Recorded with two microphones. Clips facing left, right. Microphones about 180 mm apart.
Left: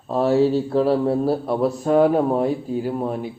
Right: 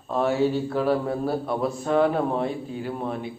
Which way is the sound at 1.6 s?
5° left (ahead or behind).